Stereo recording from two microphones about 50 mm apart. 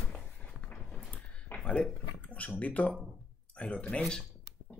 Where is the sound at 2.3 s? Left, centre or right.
Left.